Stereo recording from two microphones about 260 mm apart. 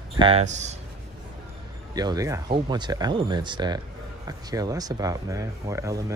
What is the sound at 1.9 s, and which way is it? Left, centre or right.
Speech, centre.